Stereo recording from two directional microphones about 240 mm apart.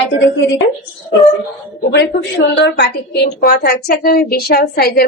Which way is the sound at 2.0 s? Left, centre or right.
Left.